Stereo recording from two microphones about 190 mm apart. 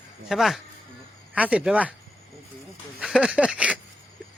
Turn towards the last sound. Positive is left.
turn(degrees=-5)  # may be behind; listen again after turning